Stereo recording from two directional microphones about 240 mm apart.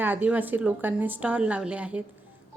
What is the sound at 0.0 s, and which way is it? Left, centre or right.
Speech, centre.